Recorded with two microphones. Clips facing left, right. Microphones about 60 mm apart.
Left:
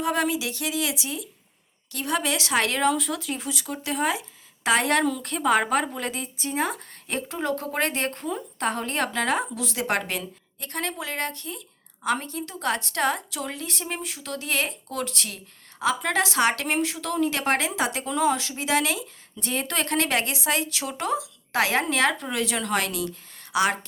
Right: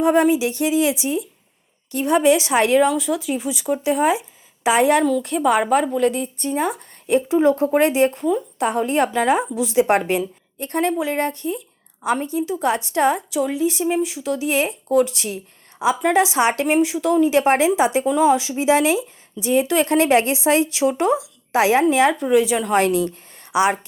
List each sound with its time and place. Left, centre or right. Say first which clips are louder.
0.0 s a woman's voice: right 9 dB; right
5.0 s speech: right 6 dB; centre
7.2 s a woman's voice: right 11 dB; centre
19.4 s a woman's voice: right 10 dB; centre
19.9 s speech: right 8 dB; right
22.8 s speech: right 10 dB; right